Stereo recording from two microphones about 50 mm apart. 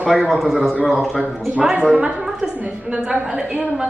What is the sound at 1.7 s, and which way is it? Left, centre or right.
A woman's voice, right.